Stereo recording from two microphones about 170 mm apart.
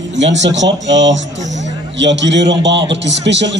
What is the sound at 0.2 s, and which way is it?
Speech, 90° right.